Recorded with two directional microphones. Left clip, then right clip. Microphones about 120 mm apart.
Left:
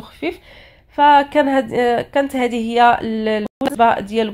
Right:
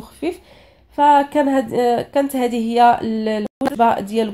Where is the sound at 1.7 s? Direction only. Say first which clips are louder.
Left 1 dB; 10° left (ahead or behind).